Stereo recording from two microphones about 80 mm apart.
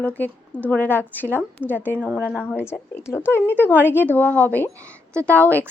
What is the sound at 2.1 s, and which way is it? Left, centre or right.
Speech, centre.